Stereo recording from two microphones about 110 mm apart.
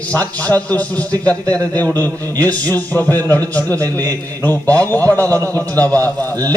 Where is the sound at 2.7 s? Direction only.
15° left (ahead or behind).